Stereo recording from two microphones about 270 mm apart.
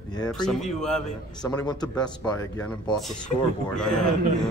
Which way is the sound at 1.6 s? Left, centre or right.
Centre.